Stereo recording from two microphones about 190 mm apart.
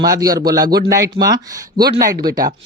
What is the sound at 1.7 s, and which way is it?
Speech, 50° right (ahead or behind).